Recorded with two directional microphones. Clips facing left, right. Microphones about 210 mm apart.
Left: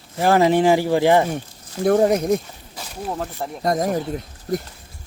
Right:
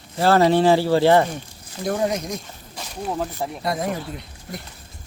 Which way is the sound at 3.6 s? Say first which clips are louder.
Left 6 dB; 45° left (ahead or behind).